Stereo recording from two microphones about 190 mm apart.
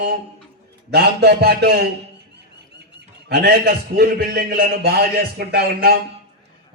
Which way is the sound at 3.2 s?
55° right (ahead or behind).